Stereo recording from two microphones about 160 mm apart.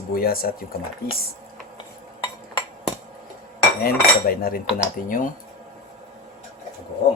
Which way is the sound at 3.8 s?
65° left (ahead or behind).